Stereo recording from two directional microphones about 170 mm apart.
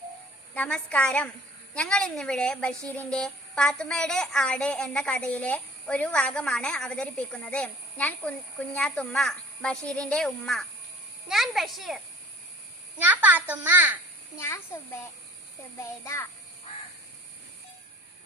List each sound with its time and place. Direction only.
0.5 s a woman's voice: 5° left (ahead or behind); by 14.0 s 10° right (ahead or behind)
14.3 s a woman's voice: 15° left (ahead or behind)